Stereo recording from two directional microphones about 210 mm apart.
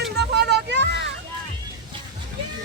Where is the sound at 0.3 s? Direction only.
50° right (ahead or behind).